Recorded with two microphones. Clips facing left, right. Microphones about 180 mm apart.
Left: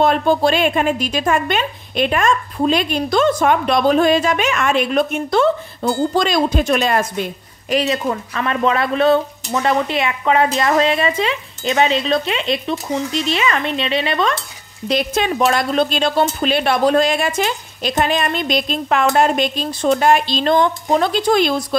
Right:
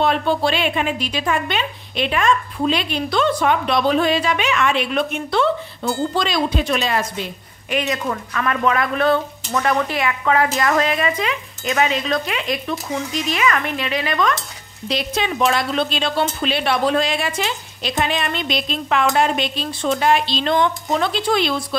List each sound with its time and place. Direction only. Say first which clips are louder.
0.0 s a woman's voice: left 4 dB; 45° left (ahead or behind)
7.7 s speech: left 4 dB; 30° left (ahead or behind)
14.9 s a woman's voice: left 4 dB; 50° left (ahead or behind)